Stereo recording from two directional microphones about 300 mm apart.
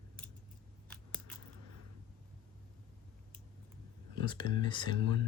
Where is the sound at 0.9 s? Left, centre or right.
Centre.